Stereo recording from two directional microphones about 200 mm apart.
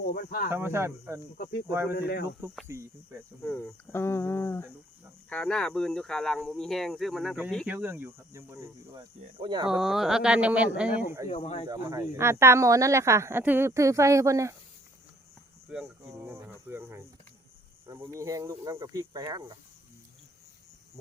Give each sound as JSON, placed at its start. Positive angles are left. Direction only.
{"t": 0.1, "sound": "speech", "side_deg": 50}
{"t": 0.5, "sound": "a woman's voice", "side_deg": -10}
{"t": 1.4, "sound": "speech", "side_deg": 55}
{"t": 2.6, "sound": "a woman's voice", "side_deg": -15}
{"t": 3.4, "sound": "speech", "side_deg": 10}
{"t": 9.6, "sound": "speech", "side_deg": 0}
{"t": 11.3, "sound": "speech", "side_deg": 30}
{"t": 11.7, "sound": "a woman's voice", "side_deg": -15}
{"t": 15.7, "sound": "cricket", "side_deg": -5}
{"t": 17.8, "sound": "a woman's voice", "side_deg": -15}